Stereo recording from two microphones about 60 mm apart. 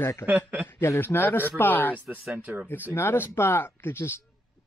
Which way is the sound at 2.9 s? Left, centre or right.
Left.